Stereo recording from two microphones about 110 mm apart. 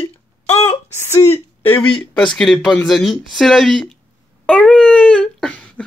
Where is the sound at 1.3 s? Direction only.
20° left (ahead or behind).